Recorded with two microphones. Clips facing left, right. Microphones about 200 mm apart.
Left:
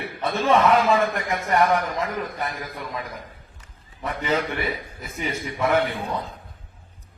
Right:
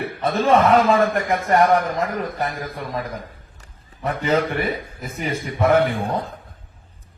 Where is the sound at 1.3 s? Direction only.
45° right (ahead or behind).